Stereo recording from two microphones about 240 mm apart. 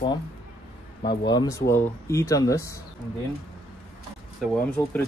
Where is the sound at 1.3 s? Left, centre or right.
Centre.